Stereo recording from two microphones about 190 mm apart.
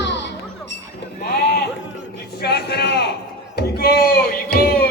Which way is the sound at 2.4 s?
60° left (ahead or behind).